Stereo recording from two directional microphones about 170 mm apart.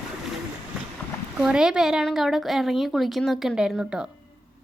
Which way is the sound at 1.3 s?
5° right (ahead or behind).